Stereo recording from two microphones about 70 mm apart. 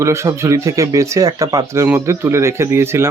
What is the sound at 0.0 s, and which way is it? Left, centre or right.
Speech, right.